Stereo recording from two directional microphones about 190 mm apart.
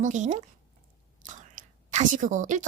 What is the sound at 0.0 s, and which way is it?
Speech, 40° right (ahead or behind).